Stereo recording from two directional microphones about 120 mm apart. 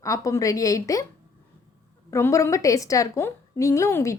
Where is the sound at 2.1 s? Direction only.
25° left (ahead or behind).